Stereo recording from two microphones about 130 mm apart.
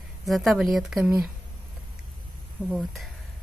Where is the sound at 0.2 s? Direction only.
Centre (ahead or behind).